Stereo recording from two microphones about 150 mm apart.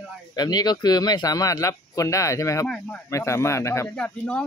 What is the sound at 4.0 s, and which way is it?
Speech, 10° left (ahead or behind).